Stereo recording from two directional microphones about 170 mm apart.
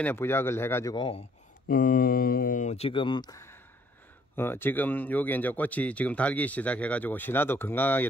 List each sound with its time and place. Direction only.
0.0 s speech: 10° left (ahead or behind)
0.9 s speech: 25° left (ahead or behind)
1.7 s speech: 50° left (ahead or behind); by 8.1 s 10° left (ahead or behind)